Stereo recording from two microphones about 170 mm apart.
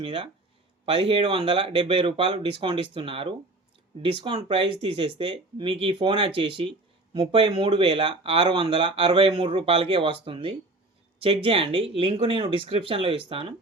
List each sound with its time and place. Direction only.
0.0 s speech: 30° right (ahead or behind)